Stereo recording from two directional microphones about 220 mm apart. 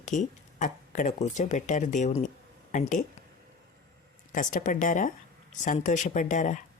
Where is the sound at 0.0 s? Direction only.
35° left (ahead or behind).